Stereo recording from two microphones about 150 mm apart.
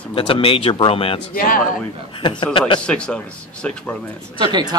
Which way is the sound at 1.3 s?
65° left (ahead or behind).